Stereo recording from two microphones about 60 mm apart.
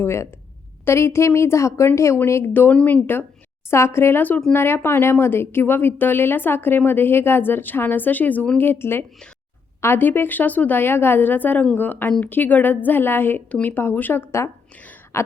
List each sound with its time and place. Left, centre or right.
0.0 s a woman's voice: left
2.1 s a woman's voice: left
2.5 s a woman's voice: left
3.7 s a woman's voice: left
15.1 s a sound: left